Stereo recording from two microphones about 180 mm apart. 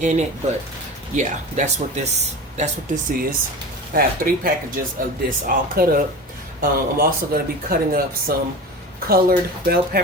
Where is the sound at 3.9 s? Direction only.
50° right (ahead or behind).